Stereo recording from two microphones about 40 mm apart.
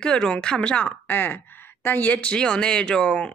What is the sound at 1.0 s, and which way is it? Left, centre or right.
Speech, left.